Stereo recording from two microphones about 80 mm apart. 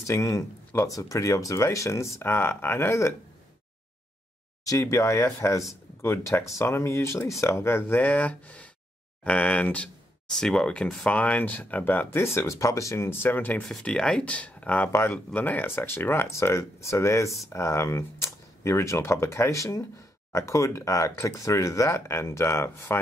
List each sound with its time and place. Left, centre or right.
0.0 s speech: left
4.6 s speech: left
12.4 s speech: left
13.7 s speech: centre
14.9 s speech: left